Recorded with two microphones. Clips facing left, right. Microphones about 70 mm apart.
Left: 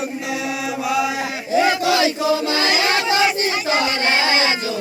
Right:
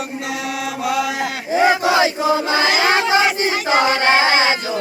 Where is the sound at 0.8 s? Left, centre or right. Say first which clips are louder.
Even; right.